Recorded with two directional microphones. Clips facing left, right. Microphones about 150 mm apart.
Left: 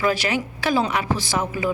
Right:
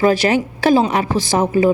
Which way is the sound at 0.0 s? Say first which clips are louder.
Right 8 dB; 40° right (ahead or behind).